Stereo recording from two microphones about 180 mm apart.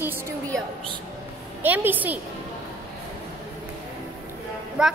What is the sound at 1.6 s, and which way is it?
Speech, 10° right (ahead or behind).